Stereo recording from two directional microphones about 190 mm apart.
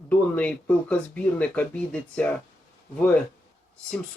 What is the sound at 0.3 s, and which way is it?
Speech, 5° left (ahead or behind).